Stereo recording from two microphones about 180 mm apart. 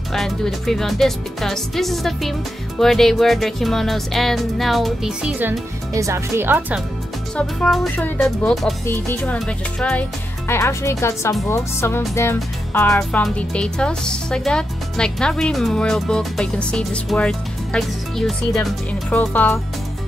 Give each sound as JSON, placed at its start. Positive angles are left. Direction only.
{"t": 0.1, "sound": "speech", "side_deg": 0}
{"t": 5.5, "sound": "speech", "side_deg": -15}
{"t": 7.3, "sound": "music", "side_deg": 0}
{"t": 12.9, "sound": "speech", "side_deg": 5}